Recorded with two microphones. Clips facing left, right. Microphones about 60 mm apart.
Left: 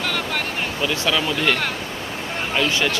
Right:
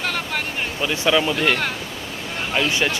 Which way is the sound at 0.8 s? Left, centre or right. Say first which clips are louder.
Right 3 dB; centre.